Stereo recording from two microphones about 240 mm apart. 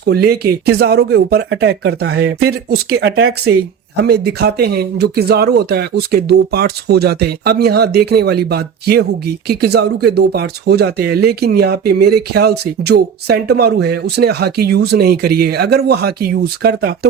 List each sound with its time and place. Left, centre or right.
0.0 s speech: right